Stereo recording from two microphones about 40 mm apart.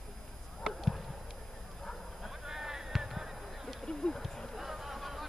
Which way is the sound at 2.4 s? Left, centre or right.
Centre.